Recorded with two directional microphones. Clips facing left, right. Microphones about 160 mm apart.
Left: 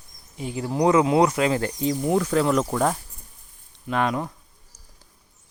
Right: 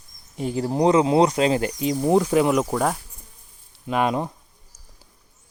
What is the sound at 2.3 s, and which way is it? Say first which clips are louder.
Speech: right 2 dB; 15° right (ahead or behind).